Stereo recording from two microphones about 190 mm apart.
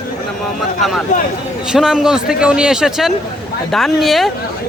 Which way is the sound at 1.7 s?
5° right (ahead or behind).